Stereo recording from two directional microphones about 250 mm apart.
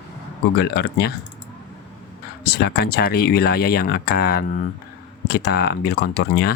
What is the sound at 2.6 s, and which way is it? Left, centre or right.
Speech, left.